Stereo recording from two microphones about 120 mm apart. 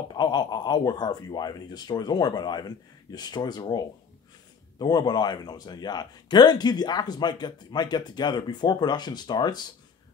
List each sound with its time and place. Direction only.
0.1 s speech: 35° left (ahead or behind)